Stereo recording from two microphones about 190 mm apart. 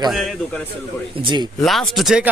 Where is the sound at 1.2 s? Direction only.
25° right (ahead or behind).